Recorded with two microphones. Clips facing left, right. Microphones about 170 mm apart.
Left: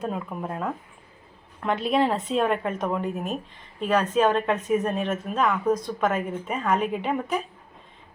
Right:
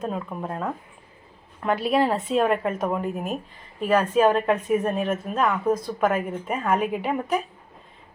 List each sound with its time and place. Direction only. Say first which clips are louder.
0.0 s a woman's voice: right 1 dB; centre (ahead or behind)